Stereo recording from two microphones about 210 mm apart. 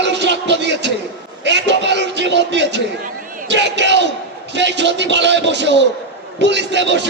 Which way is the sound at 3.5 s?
55° right (ahead or behind).